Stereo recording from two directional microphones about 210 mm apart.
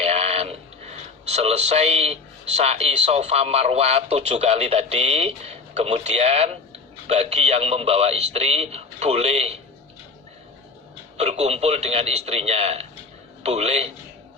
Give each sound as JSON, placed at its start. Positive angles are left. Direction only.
{"t": 0.0, "sound": "a man's voice", "side_deg": -30}
{"t": 11.2, "sound": "a man's voice", "side_deg": -30}